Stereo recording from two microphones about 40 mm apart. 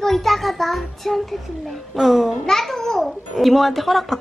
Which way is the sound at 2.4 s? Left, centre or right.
Centre.